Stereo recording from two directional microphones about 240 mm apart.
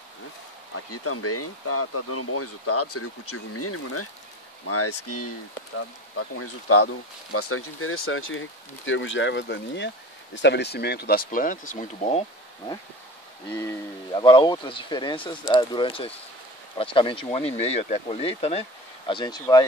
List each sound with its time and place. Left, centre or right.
0.9 s speech: left
13.6 s speech: centre